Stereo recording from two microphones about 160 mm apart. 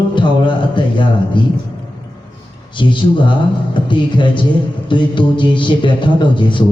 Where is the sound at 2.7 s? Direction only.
30° left (ahead or behind).